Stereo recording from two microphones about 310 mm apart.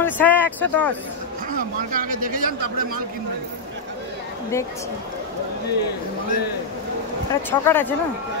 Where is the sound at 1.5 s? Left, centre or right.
Right.